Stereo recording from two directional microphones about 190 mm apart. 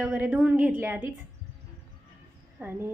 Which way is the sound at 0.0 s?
5° right (ahead or behind).